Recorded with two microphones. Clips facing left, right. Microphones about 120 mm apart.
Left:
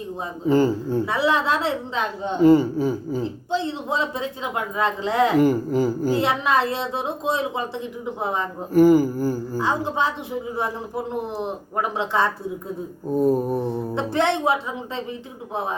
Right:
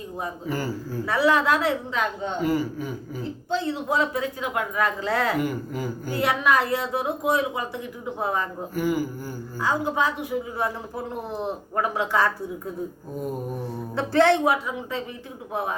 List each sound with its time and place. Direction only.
0.2 s speech: 25° left (ahead or behind)
5.4 s speech: 35° left (ahead or behind)
8.7 s speech: 40° left (ahead or behind)
9.6 s speech: 25° left (ahead or behind)
13.1 s speech: 35° left (ahead or behind)
13.9 s speech: 20° left (ahead or behind)